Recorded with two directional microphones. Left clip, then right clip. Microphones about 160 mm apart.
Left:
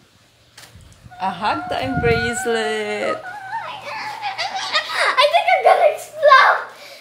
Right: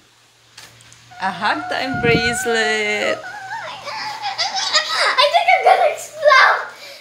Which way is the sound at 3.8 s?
15° left (ahead or behind).